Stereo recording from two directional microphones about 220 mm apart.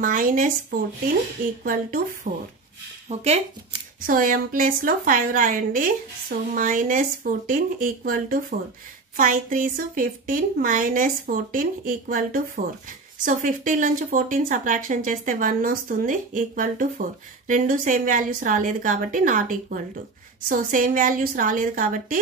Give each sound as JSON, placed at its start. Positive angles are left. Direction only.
{"t": 0.0, "sound": "a woman's voice", "side_deg": -40}
{"t": 3.1, "sound": "a woman's voice", "side_deg": -30}